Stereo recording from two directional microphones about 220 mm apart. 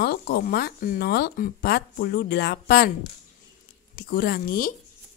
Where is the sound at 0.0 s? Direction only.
45° left (ahead or behind).